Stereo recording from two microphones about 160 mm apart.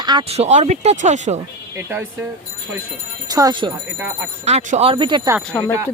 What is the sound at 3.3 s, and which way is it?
Speech, 25° right (ahead or behind).